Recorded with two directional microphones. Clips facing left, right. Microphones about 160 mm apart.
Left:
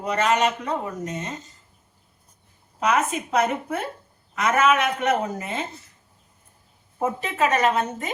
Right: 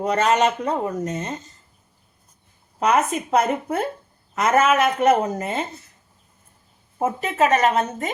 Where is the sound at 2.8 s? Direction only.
40° right (ahead or behind).